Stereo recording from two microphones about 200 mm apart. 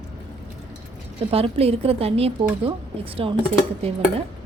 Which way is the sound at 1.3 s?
30° right (ahead or behind).